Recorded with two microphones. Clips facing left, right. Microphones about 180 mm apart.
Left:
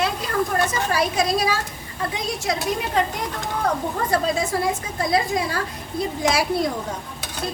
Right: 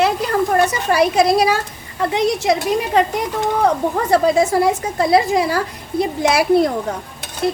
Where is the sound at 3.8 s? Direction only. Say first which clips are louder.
Right 7 dB; 70° right (ahead or behind).